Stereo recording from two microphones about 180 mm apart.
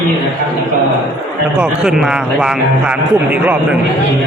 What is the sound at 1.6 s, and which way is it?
A man's voice, centre (ahead or behind).